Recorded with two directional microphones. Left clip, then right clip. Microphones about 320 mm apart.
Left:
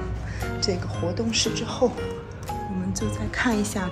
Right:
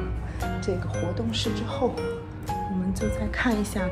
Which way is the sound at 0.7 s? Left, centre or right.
Centre.